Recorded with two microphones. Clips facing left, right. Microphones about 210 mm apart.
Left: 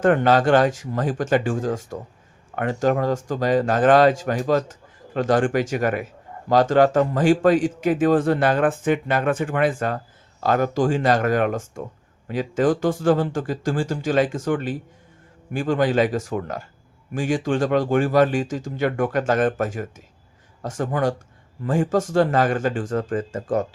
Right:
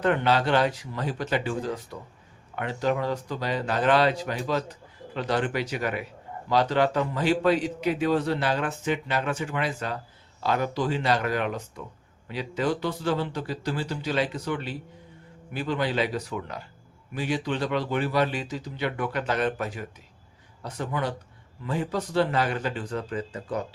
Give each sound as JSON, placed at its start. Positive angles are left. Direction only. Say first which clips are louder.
{"t": 0.0, "sound": "speech", "louder": "left 6 dB", "side_deg": 45}